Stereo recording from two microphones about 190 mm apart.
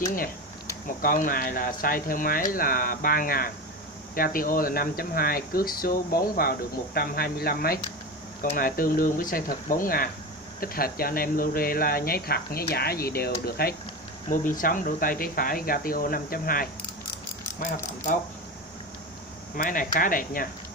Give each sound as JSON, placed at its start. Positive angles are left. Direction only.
{"t": 0.0, "sound": "speech", "side_deg": 45}
{"t": 19.5, "sound": "speech", "side_deg": 45}